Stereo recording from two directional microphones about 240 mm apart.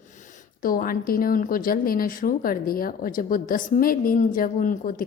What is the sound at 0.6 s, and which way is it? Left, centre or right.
A woman's voice, left.